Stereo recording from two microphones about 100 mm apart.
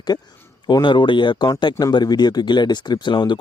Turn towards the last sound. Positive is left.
turn(degrees=50)  # may be behind; listen again after turning